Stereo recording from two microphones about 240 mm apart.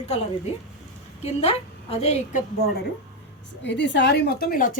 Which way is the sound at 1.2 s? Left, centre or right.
Left.